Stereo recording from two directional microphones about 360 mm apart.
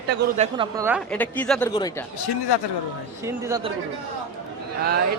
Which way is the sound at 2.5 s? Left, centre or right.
Left.